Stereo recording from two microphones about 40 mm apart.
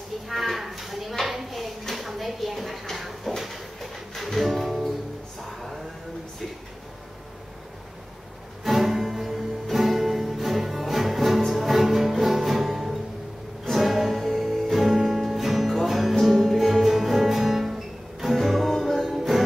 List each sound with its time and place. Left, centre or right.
0.3 s speech: centre
1.2 s a sound: centre
8.6 s music: centre